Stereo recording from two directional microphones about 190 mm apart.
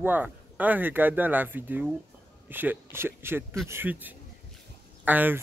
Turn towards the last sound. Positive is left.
turn(degrees=-10)  # may be behind; listen again after turning